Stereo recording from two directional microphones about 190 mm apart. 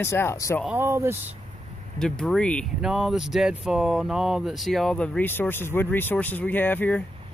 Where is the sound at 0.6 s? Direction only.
10° right (ahead or behind).